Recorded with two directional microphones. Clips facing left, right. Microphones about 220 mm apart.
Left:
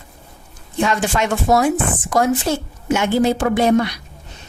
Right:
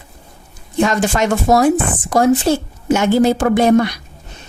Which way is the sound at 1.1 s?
40° right (ahead or behind).